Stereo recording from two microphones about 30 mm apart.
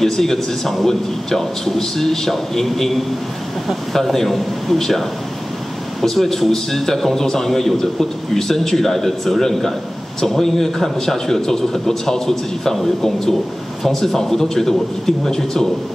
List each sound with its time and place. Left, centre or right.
0.0 s a man's voice: centre
6.0 s a man's voice: centre